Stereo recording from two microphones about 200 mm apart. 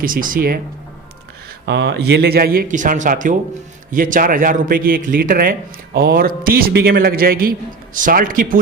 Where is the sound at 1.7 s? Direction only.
55° right (ahead or behind).